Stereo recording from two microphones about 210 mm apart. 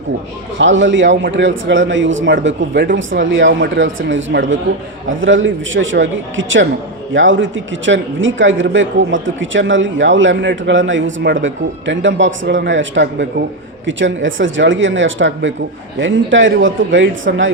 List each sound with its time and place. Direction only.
0.6 s speech: 60° right (ahead or behind)